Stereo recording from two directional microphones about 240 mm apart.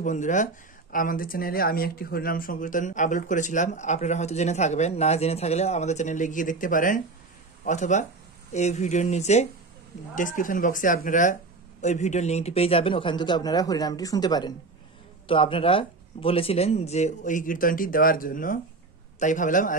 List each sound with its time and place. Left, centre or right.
0.0 s speech: left